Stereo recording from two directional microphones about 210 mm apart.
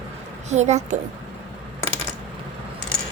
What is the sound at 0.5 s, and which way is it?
Speech, 35° right (ahead or behind).